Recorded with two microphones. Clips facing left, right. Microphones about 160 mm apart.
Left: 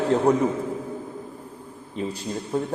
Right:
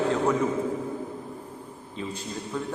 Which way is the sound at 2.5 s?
30° left (ahead or behind).